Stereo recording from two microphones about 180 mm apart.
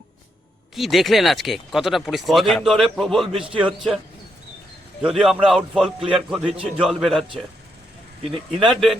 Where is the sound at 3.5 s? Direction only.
30° right (ahead or behind).